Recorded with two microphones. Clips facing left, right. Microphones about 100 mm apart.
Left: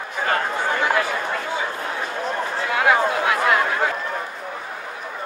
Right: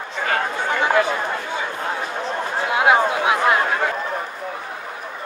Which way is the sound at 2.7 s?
20° right (ahead or behind).